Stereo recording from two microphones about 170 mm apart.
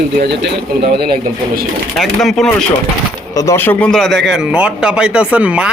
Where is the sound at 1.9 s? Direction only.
Centre (ahead or behind).